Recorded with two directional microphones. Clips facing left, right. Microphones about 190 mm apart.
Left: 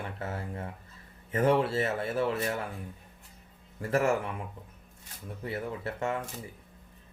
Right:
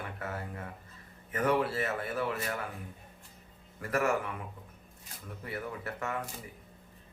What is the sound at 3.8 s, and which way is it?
Speech, 25° left (ahead or behind).